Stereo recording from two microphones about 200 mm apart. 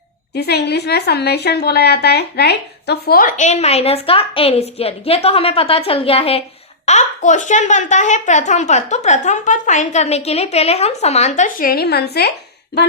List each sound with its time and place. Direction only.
0.3 s a woman's voice: 55° left (ahead or behind)